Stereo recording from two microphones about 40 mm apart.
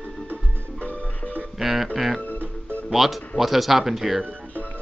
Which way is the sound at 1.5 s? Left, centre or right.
Centre.